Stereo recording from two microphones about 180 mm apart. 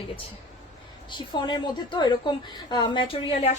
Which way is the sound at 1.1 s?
25° left (ahead or behind).